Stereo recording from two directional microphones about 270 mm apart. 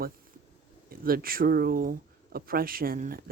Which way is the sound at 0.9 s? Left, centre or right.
Right.